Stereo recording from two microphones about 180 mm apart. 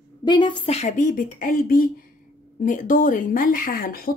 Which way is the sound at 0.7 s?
40° left (ahead or behind).